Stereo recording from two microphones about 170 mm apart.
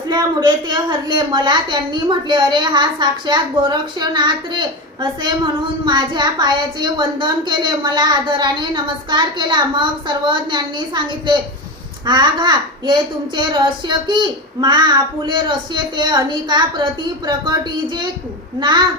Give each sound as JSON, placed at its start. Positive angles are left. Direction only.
{"t": 0.1, "sound": "a woman's voice", "side_deg": -25}